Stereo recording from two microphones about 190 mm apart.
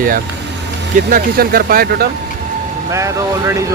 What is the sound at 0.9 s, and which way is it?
Speech, 50° right (ahead or behind).